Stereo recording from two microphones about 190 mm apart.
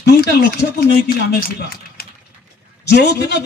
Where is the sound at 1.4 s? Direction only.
55° left (ahead or behind).